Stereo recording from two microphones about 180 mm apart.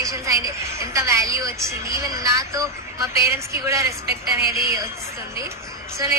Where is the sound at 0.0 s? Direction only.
15° right (ahead or behind).